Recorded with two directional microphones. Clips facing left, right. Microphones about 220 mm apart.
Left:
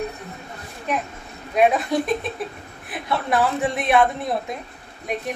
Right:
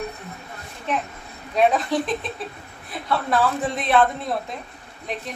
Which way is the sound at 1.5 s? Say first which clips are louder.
Left 1 dB; 10° left (ahead or behind).